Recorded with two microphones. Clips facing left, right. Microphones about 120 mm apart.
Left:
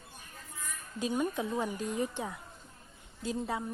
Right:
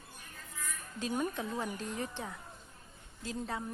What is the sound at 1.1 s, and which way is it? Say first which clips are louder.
Speech: left 3 dB; centre (ahead or behind).